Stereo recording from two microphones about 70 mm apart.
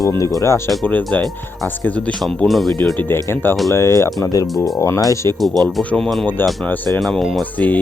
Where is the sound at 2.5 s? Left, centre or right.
Centre.